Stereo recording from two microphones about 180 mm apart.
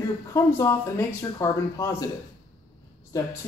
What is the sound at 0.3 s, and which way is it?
Speech, 15° left (ahead or behind).